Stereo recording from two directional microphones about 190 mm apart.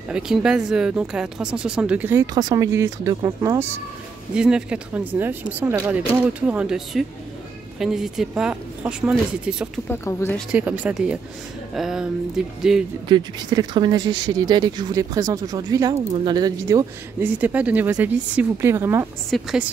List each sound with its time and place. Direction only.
0.1 s speech: 5° right (ahead or behind)
4.3 s speech: 5° right (ahead or behind)
9.8 s speech: 10° left (ahead or behind)
10.5 s speech: 10° right (ahead or behind)
13.1 s speech: 25° right (ahead or behind)
19.3 s speech: centre (ahead or behind)